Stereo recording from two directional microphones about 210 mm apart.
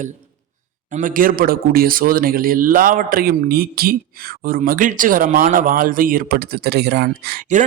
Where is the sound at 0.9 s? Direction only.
40° right (ahead or behind).